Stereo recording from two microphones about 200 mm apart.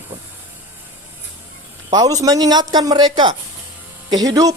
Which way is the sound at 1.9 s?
20° right (ahead or behind).